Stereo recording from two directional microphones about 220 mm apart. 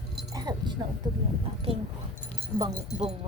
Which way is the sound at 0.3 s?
20° right (ahead or behind).